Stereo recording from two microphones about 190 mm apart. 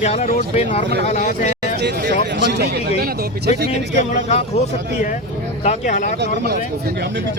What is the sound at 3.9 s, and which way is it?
Speech, 35° left (ahead or behind).